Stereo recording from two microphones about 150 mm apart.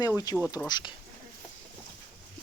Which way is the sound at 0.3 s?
25° left (ahead or behind).